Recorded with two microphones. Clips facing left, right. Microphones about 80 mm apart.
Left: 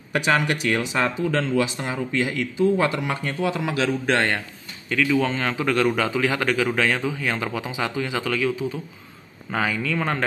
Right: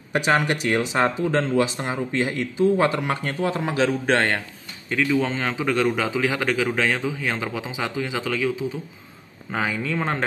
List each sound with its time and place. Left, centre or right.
0.1 s speech: right
4.8 s speech: right
9.7 s speech: right